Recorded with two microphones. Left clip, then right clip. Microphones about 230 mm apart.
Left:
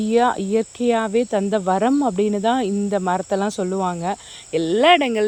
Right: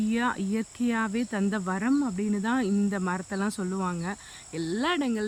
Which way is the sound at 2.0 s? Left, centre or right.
Left.